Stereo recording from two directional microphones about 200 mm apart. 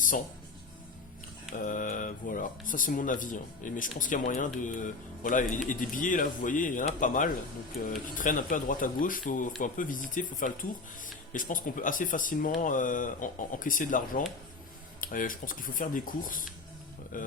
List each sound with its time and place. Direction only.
1.5 s speech: 40° left (ahead or behind)